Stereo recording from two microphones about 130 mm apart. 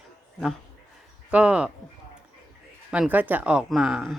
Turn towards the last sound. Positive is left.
turn(degrees=-5)  # may be behind; listen again after turning